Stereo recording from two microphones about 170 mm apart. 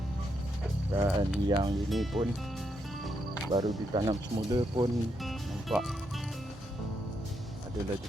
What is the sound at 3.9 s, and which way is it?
Speech, 30° right (ahead or behind).